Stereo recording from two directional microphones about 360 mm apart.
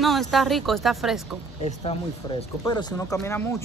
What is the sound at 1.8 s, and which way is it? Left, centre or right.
Speech, centre.